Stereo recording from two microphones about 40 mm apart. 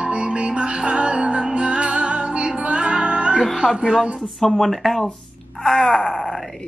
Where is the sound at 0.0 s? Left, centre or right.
Right.